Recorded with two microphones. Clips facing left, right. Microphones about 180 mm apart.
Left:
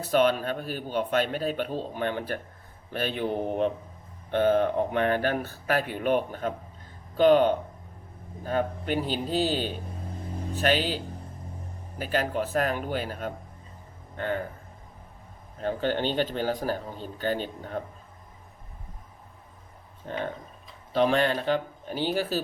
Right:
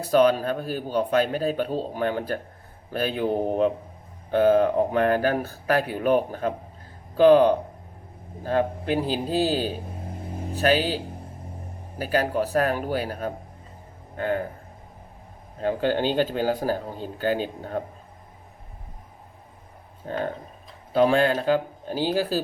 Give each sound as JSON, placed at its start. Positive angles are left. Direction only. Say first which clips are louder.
{"t": 0.1, "sound": "speech", "louder": "right 4 dB", "side_deg": -35}
{"t": 8.6, "sound": "speech", "louder": "right 4 dB", "side_deg": -40}
{"t": 9.7, "sound": "vehicle", "louder": "right 3 dB", "side_deg": -10}
{"t": 10.6, "sound": "speech", "louder": "right 4 dB", "side_deg": -40}
{"t": 15.8, "sound": "a man's voice", "louder": "right 4 dB", "side_deg": -40}
{"t": 20.1, "sound": "speech", "louder": "right 4 dB", "side_deg": -40}